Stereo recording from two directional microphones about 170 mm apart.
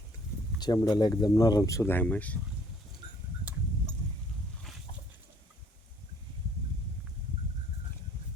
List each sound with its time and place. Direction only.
0.6 s speech: 20° left (ahead or behind)